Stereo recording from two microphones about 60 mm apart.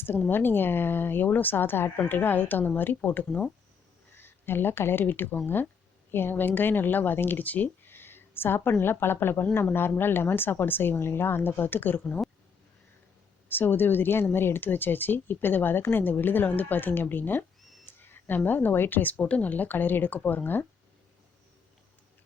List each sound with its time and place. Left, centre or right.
0.3 s speech: left
13.5 s speech: left